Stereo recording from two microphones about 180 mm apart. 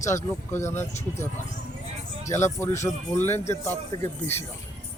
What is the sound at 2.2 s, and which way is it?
Speech, 15° left (ahead or behind).